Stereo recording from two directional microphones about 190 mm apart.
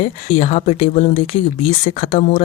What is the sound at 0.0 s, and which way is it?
Speech, 35° left (ahead or behind).